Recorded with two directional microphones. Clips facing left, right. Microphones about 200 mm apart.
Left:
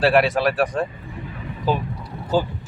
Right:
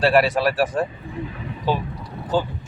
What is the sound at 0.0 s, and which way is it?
Speech, centre (ahead or behind).